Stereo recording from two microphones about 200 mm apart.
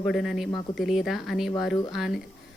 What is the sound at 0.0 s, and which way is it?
A woman's voice, centre (ahead or behind).